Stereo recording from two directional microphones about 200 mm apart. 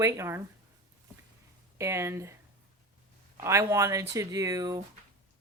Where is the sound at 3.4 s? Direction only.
15° right (ahead or behind).